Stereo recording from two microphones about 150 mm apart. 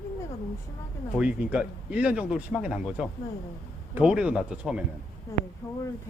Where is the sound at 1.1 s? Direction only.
10° right (ahead or behind).